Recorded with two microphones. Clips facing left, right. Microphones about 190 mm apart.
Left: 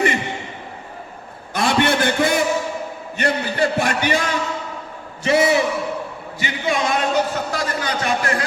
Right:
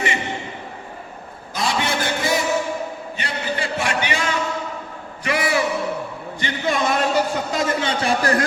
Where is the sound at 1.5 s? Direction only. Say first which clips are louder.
Left 5 dB; 60° left (ahead or behind).